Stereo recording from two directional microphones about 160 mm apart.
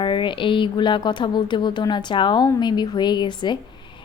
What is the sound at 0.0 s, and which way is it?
Speech, 30° left (ahead or behind).